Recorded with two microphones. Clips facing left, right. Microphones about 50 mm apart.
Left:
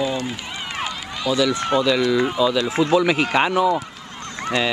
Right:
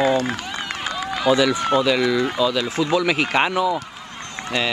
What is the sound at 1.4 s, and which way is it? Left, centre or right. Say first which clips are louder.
Speech: right 1 dB; centre.